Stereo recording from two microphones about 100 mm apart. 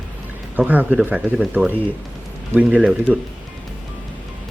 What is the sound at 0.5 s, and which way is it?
Speech, 15° right (ahead or behind).